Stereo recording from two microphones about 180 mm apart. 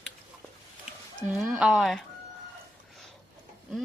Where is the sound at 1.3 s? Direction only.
5° right (ahead or behind).